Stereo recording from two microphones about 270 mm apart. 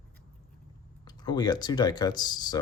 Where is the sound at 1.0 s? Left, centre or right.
Centre.